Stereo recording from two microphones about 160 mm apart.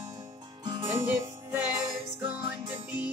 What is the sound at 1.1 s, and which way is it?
Music, 15° right (ahead or behind).